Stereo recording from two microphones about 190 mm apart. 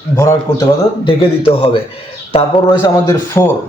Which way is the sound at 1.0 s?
30° left (ahead or behind).